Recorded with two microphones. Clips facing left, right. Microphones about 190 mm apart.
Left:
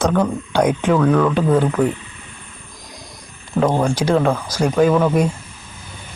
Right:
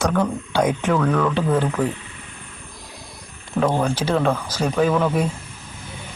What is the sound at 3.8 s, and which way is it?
Speech, 10° left (ahead or behind).